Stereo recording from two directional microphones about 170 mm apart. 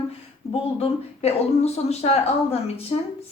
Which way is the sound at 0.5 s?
35° left (ahead or behind).